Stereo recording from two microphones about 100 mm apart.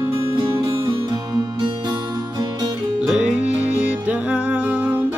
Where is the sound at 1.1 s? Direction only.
45° right (ahead or behind).